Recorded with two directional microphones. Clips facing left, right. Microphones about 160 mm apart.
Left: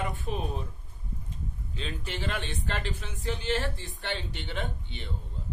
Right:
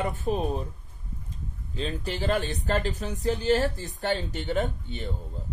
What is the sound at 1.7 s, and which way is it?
Speech, 35° right (ahead or behind).